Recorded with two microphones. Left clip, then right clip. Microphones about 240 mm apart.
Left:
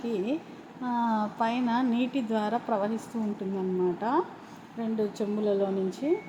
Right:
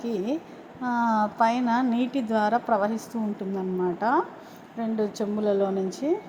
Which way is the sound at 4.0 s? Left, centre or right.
Centre.